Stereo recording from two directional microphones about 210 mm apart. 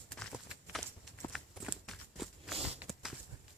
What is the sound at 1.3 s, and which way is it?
Walk, centre (ahead or behind).